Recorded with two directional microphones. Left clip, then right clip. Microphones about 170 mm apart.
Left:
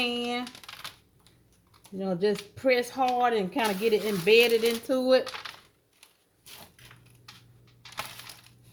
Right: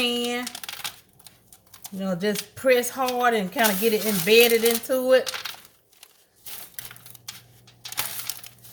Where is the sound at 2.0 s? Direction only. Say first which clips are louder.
Right 1 dB; 35° left (ahead or behind).